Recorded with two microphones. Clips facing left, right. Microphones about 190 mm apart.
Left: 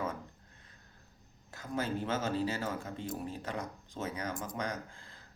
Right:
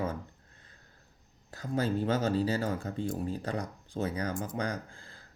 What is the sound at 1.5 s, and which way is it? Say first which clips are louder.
Speech: right 5 dB; 35° right (ahead or behind).